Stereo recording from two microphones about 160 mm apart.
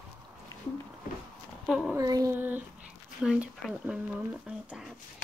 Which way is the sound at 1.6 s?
5° right (ahead or behind).